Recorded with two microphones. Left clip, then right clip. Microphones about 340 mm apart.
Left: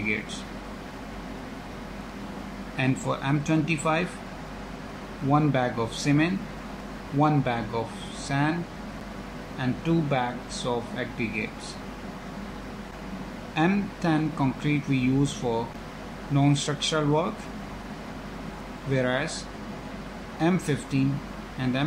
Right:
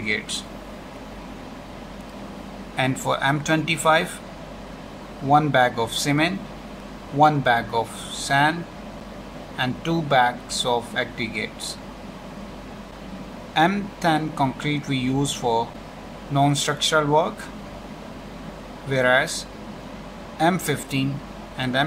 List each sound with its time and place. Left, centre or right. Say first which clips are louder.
2.7 s speech: right 5 dB; right
5.3 s speech: right 7 dB; right
9.6 s speech: right 3 dB; right
13.6 s speech: right 6 dB; right
16.3 s speech: right 5 dB; right
18.9 s speech: right 8 dB; right